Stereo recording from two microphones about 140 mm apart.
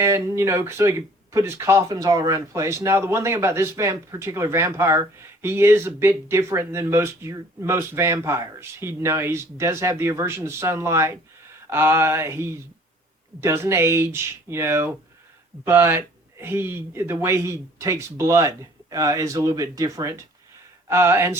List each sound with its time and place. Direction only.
0.0 s speech: 20° right (ahead or behind)